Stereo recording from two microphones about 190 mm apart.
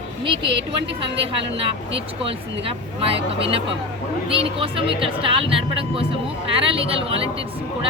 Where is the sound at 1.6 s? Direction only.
30° right (ahead or behind).